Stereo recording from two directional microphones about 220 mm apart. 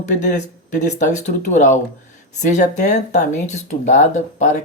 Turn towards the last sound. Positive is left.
turn(degrees=35)  # may be behind; listen again after turning